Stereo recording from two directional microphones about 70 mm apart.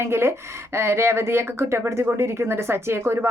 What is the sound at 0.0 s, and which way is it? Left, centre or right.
Speech, right.